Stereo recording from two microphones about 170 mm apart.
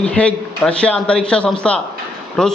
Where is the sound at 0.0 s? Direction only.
5° left (ahead or behind).